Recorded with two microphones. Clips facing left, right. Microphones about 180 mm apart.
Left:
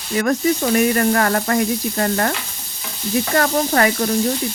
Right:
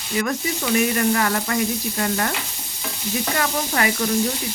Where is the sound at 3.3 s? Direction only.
45° left (ahead or behind).